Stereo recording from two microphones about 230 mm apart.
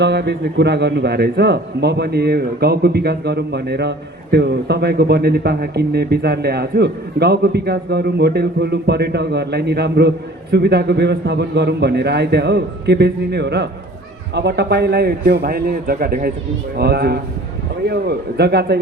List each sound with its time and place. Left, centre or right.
0.0 s a man's voice: right